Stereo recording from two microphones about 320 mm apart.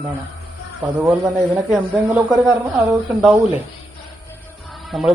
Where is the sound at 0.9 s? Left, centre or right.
Centre.